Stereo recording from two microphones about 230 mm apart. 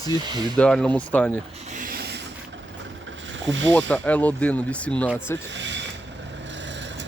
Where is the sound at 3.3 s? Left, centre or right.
Right.